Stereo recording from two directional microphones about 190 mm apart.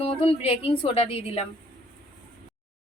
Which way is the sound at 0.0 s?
30° left (ahead or behind).